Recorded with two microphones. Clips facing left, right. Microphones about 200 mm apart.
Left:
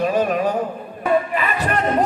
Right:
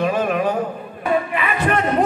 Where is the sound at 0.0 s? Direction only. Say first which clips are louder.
Left 1 dB; 40° left (ahead or behind).